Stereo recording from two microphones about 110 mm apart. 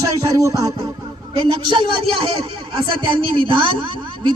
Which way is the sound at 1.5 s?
50° right (ahead or behind).